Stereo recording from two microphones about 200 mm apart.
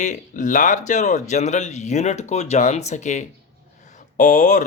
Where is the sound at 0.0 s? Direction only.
40° left (ahead or behind).